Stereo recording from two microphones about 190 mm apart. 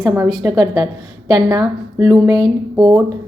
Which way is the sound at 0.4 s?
20° right (ahead or behind).